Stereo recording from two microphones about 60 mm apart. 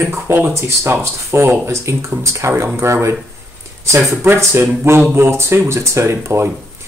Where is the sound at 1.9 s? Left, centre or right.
Right.